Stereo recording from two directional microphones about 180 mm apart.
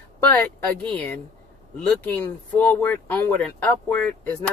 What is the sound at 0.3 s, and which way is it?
Speech, 10° left (ahead or behind).